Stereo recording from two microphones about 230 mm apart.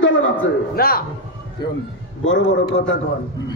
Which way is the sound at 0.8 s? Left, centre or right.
Left.